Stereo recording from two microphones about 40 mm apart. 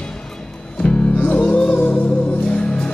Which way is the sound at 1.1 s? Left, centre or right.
Left.